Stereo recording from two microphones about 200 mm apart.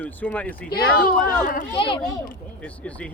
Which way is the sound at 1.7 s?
25° left (ahead or behind).